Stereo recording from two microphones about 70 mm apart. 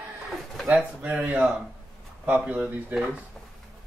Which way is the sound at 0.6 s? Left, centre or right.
Centre.